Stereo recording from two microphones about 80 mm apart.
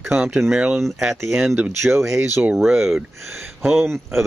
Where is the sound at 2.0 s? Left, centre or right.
Right.